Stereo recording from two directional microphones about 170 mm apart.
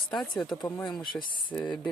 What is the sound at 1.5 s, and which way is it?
Speech, 10° left (ahead or behind).